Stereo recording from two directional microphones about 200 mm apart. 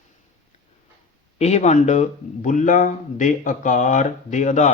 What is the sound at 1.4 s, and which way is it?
Speech, 35° left (ahead or behind).